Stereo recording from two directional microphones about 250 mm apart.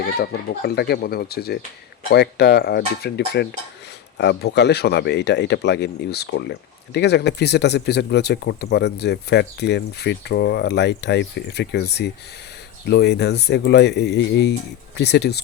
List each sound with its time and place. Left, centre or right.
0.2 s speech: left